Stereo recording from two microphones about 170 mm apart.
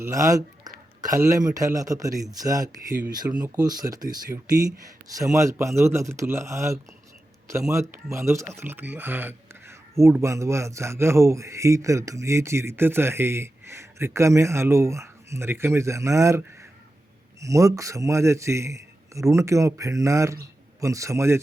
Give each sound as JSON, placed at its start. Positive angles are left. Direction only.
{"t": 0.0, "sound": "a man's voice", "side_deg": -20}